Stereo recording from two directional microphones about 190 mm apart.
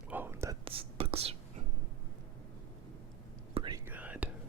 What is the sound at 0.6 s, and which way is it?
Whispering, 30° right (ahead or behind).